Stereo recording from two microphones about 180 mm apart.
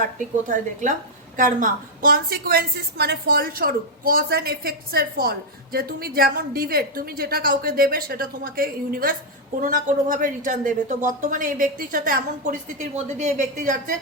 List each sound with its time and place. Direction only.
0.2 s a woman's voice: 45° right (ahead or behind)